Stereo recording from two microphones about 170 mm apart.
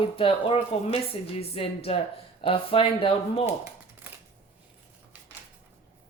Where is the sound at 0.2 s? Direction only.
30° left (ahead or behind).